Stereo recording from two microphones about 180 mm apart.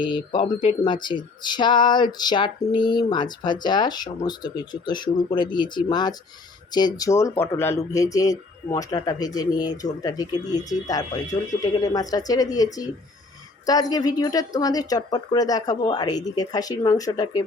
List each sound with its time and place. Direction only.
0.0 s speech: 25° left (ahead or behind)